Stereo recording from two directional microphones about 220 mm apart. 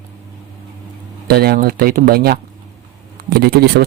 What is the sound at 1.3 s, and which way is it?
Speech, 45° right (ahead or behind).